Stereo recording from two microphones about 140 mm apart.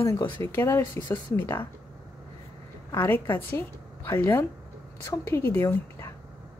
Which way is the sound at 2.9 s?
15° left (ahead or behind).